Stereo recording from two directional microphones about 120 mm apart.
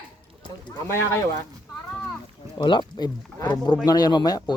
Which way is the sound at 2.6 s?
40° left (ahead or behind).